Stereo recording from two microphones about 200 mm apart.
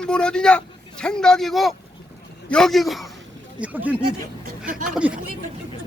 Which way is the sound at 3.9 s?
50° right (ahead or behind).